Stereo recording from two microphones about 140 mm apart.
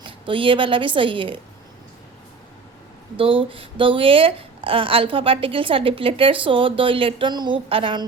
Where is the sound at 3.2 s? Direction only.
40° right (ahead or behind).